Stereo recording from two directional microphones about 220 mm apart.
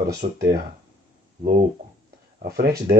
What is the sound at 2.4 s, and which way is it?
Speech, 45° right (ahead or behind).